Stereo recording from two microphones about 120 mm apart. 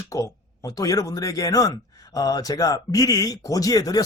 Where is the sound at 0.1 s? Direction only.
30° left (ahead or behind).